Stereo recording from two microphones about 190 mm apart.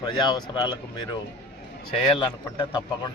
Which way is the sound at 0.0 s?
20° left (ahead or behind).